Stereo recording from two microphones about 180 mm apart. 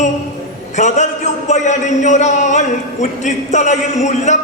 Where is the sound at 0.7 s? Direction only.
40° left (ahead or behind).